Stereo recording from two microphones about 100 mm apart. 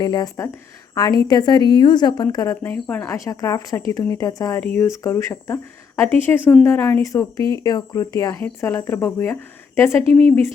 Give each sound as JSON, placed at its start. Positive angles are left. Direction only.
{"t": 0.0, "sound": "a woman's voice", "side_deg": 40}
{"t": 2.7, "sound": "speech", "side_deg": 15}
{"t": 3.1, "sound": "speech", "side_deg": 35}
{"t": 4.6, "sound": "speech", "side_deg": 20}
{"t": 4.9, "sound": "speech", "side_deg": 30}
{"t": 7.0, "sound": "speech", "side_deg": 35}
{"t": 10.1, "sound": "speech", "side_deg": 15}